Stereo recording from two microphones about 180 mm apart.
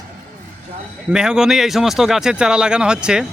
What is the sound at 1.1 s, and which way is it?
Speech, 5° right (ahead or behind).